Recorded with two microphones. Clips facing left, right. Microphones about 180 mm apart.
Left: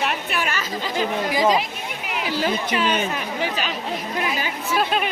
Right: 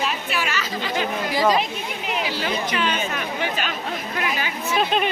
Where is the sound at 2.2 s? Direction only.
40° left (ahead or behind).